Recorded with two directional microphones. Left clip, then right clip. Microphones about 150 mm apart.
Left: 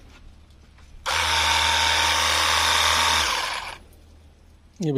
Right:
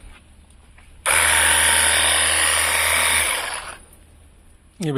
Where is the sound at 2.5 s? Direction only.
25° left (ahead or behind).